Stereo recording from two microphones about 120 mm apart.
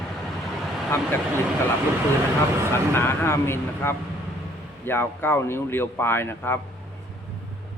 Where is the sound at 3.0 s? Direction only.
20° left (ahead or behind).